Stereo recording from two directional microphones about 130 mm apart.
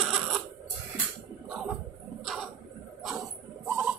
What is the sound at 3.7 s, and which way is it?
Music, 5° right (ahead or behind).